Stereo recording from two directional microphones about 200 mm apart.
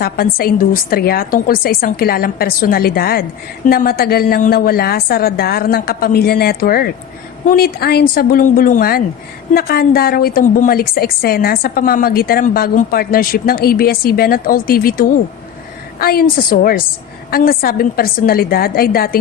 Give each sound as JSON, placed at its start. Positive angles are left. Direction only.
{"t": 0.0, "sound": "a woman's voice", "side_deg": 50}